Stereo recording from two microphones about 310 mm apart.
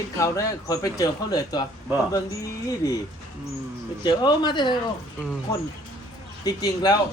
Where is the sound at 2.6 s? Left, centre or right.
Centre.